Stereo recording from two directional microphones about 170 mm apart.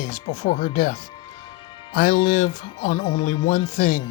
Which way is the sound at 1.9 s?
50° left (ahead or behind).